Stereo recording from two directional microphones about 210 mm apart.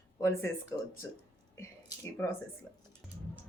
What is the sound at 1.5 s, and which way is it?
Speech, 15° left (ahead or behind).